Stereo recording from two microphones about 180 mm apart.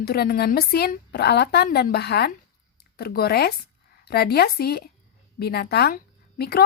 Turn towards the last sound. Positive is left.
turn(degrees=60)  # may be behind; listen again after turning